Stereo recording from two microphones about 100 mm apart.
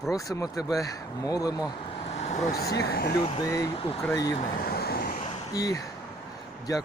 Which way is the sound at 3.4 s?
35° left (ahead or behind).